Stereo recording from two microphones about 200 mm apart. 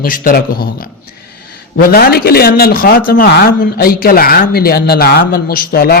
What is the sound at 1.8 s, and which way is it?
Speech, 50° left (ahead or behind).